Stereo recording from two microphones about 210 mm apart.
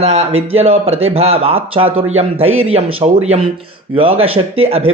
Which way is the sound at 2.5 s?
75° right (ahead or behind).